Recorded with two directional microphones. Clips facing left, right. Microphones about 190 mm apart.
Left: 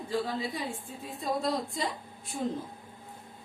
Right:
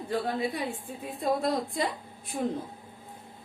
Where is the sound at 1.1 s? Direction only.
55° right (ahead or behind).